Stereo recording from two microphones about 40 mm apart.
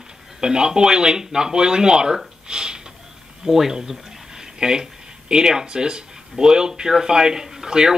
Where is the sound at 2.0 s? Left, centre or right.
Centre.